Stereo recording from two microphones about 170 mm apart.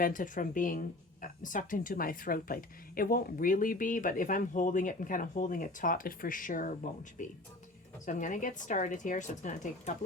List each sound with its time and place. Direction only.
0.0 s speech: 55° left (ahead or behind)